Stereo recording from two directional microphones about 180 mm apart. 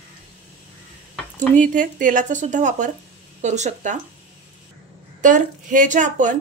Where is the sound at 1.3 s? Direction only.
45° right (ahead or behind).